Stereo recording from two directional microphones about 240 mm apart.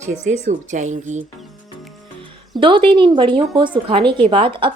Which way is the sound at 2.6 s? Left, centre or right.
Right.